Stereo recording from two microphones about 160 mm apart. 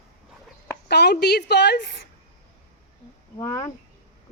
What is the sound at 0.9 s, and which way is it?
A woman's voice, 90° left.